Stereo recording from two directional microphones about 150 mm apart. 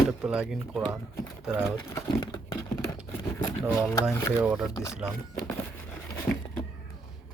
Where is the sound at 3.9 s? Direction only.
20° left (ahead or behind).